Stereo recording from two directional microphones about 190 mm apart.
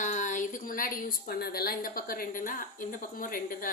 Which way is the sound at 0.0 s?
40° left (ahead or behind).